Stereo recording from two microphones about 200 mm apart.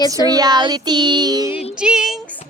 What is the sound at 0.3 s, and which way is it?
Child singing, 20° right (ahead or behind).